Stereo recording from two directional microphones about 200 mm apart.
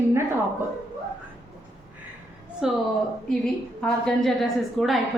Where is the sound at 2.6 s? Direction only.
5° right (ahead or behind).